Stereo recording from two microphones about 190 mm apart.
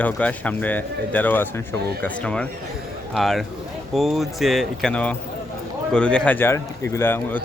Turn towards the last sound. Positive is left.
turn(degrees=10)  # may be behind; listen again after turning